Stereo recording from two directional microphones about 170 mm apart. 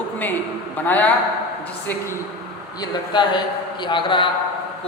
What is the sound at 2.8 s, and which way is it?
A man's voice, 25° left (ahead or behind).